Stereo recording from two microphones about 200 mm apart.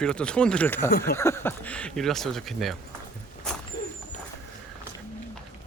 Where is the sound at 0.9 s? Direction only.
50° left (ahead or behind).